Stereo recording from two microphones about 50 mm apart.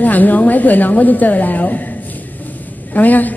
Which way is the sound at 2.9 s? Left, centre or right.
Left.